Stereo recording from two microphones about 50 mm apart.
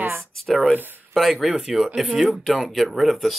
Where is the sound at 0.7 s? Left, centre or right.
Right.